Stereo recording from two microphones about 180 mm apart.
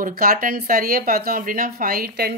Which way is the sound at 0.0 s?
55° right (ahead or behind).